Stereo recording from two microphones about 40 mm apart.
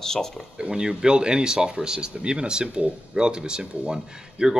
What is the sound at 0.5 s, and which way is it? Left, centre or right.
Speech, right.